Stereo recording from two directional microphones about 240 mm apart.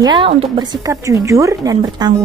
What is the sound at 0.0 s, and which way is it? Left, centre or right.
Speech, centre.